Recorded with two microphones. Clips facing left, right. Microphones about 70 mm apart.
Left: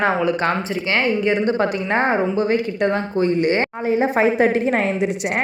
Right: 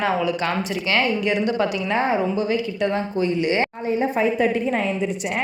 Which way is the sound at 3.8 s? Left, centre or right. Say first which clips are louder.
Left 6 dB; left.